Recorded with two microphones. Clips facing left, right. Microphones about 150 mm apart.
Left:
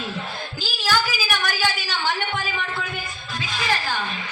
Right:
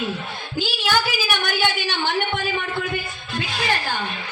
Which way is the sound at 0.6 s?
65° right (ahead or behind).